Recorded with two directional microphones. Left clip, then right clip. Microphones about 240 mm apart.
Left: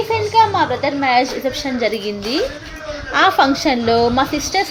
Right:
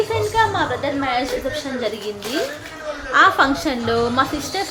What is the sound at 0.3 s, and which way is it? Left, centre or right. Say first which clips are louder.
A woman's voice: left 6 dB; left.